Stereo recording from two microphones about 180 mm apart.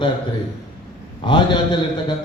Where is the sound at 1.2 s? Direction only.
25° left (ahead or behind).